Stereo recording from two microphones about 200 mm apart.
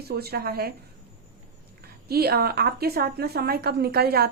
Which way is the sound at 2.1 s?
50° right (ahead or behind).